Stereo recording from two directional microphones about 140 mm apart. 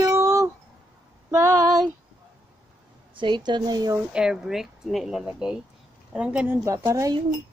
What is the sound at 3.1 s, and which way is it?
Speech, 35° right (ahead or behind).